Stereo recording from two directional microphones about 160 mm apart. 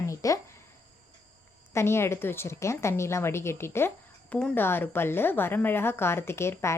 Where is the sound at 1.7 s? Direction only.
15° left (ahead or behind).